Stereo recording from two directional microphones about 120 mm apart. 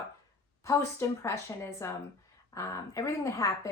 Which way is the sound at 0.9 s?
25° left (ahead or behind).